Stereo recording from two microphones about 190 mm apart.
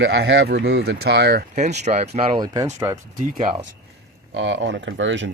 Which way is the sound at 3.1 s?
45° right (ahead or behind).